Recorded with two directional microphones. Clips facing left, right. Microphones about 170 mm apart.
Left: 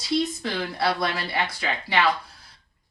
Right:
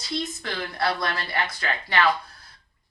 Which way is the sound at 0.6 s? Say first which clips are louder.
Left 1 dB; 10° left (ahead or behind).